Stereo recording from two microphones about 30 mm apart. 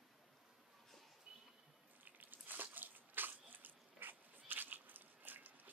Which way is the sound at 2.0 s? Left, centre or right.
Right.